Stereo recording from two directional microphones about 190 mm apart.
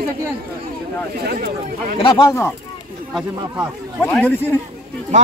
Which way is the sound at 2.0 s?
25° left (ahead or behind).